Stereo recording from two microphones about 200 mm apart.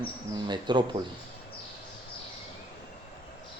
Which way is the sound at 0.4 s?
20° right (ahead or behind).